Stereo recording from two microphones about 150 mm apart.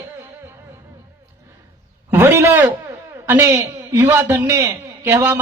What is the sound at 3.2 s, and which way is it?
A man's voice, 15° right (ahead or behind).